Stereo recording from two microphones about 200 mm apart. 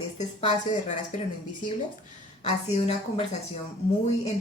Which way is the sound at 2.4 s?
30° left (ahead or behind).